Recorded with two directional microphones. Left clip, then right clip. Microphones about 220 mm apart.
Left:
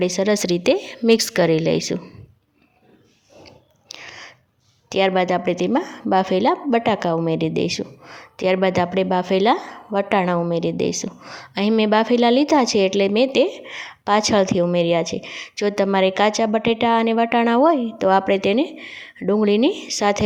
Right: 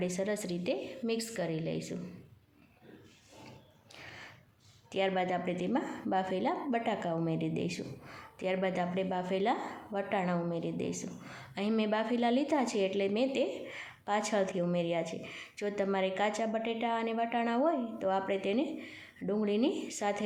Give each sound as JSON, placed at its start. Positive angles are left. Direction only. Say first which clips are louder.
{"t": 0.0, "sound": "a woman's voice", "louder": "left 15 dB", "side_deg": 40}
{"t": 4.9, "sound": "a woman's voice", "louder": "left 13 dB", "side_deg": 40}